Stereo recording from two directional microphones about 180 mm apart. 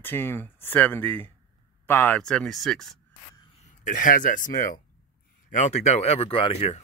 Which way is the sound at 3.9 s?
45° left (ahead or behind).